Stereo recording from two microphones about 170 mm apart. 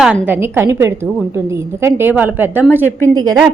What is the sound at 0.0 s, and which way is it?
A woman's voice, 10° right (ahead or behind).